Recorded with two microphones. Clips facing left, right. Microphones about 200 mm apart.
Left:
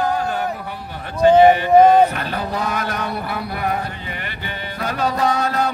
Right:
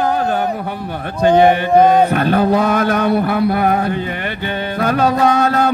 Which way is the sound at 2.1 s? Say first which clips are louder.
Right 11 dB; 55° right (ahead or behind).